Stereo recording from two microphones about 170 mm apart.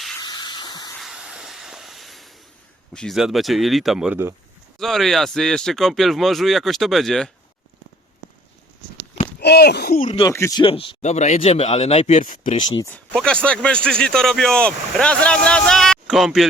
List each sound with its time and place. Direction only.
0.2 s hiss: 25° left (ahead or behind)
0.9 s a sound: 5° right (ahead or behind)
2.9 s speech: centre (ahead or behind)
9.4 s speech: 70° left (ahead or behind)
10.1 s speech: 25° left (ahead or behind)
10.3 s speech: 15° left (ahead or behind)
10.6 s speech: 30° left (ahead or behind)
12.3 s speech: 50° left (ahead or behind)
13.1 s speech: 5° left (ahead or behind)